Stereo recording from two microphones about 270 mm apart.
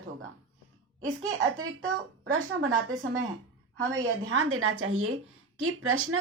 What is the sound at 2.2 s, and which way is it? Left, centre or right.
Speech, right.